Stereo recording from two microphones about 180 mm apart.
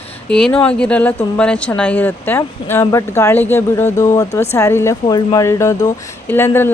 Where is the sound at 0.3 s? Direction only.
5° left (ahead or behind).